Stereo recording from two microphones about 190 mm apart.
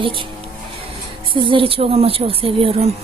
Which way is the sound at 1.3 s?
25° right (ahead or behind).